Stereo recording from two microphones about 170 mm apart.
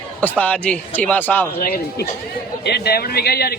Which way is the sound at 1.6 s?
65° left (ahead or behind).